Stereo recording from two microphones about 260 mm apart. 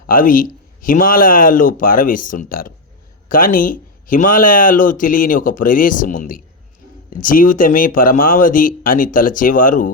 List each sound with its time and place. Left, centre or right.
0.1 s speech: left